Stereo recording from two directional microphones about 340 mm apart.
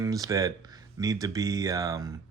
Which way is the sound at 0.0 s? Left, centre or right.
Centre.